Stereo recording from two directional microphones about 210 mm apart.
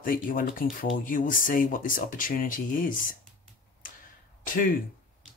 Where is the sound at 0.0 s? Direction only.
40° left (ahead or behind).